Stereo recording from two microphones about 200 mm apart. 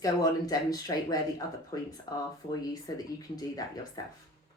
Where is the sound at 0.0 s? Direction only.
20° left (ahead or behind).